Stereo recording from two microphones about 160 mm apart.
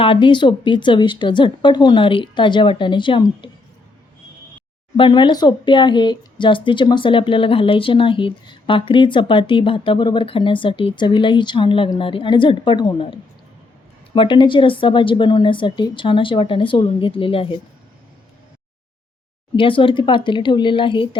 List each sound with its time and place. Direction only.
0.0 s speech: 30° left (ahead or behind)
4.9 s speech: 30° left (ahead or behind)
14.2 s speech: 30° left (ahead or behind)
19.5 s speech: 30° left (ahead or behind)